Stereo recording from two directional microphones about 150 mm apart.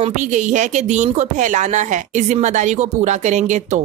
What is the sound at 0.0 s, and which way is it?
A woman's voice, 55° right (ahead or behind).